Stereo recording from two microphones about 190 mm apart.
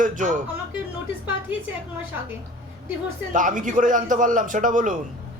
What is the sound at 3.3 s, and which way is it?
A man's voice, 45° right (ahead or behind).